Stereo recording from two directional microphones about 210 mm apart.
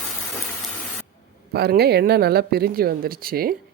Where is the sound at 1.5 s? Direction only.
50° right (ahead or behind).